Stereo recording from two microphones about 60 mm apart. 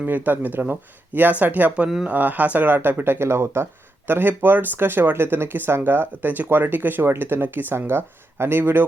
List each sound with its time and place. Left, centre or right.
0.0 s speech: right
4.0 s speech: right